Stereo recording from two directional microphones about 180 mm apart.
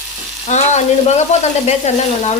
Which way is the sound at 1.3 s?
35° left (ahead or behind).